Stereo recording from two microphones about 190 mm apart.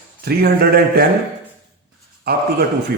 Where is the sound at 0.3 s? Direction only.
55° right (ahead or behind).